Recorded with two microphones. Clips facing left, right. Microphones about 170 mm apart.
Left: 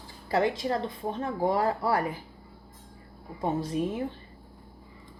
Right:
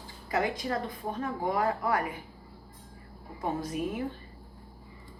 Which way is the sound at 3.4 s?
30° left (ahead or behind).